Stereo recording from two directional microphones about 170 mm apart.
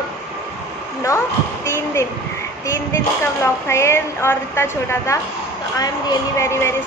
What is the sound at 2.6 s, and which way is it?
Speech, 15° left (ahead or behind).